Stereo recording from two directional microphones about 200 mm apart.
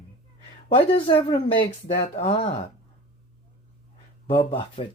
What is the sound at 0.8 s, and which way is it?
Speech, 25° left (ahead or behind).